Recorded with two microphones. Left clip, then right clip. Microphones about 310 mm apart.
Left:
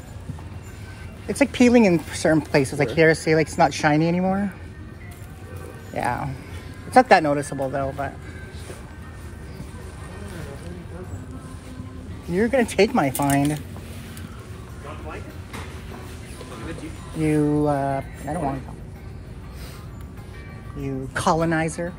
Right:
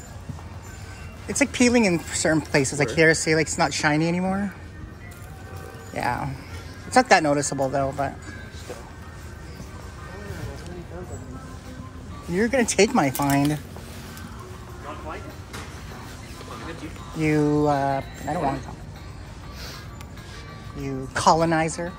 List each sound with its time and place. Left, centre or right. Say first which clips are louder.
1.2 s speech: left 2 dB; centre
5.9 s speech: left 1 dB; centre
12.3 s speech: left 1 dB; centre
17.2 s speech: even; centre
20.8 s speech: right 3 dB; centre